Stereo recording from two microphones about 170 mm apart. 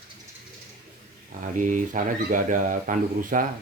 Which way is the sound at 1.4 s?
50° right (ahead or behind).